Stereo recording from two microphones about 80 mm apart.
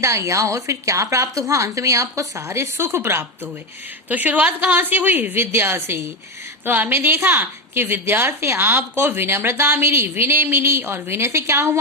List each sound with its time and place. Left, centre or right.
0.0 s a woman's voice: right
4.1 s a woman's voice: centre; by 11.8 s right